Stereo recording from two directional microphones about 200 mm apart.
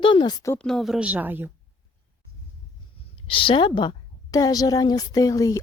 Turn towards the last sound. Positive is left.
turn(degrees=20)  # may be behind; listen again after turning